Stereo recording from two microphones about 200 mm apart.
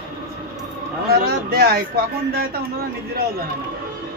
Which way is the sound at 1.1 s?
50° right (ahead or behind).